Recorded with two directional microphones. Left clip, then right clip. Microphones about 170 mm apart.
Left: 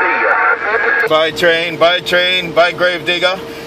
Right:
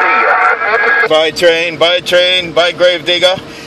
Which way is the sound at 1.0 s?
30° right (ahead or behind).